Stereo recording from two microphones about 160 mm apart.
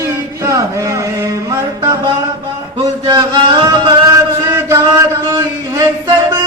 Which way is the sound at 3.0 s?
30° right (ahead or behind).